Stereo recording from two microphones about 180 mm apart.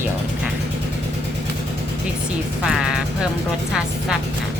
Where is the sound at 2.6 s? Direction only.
5° right (ahead or behind).